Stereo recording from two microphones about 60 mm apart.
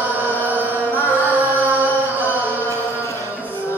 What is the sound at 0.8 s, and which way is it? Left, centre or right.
Music, left.